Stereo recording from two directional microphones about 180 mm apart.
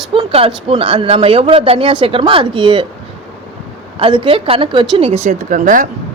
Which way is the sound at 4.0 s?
30° right (ahead or behind).